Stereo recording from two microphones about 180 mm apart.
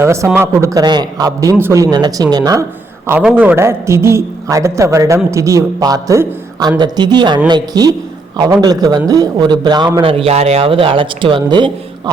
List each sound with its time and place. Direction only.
0.0 s a man's voice: 15° right (ahead or behind)
3.1 s a man's voice: 10° right (ahead or behind); by 11.7 s 25° right (ahead or behind)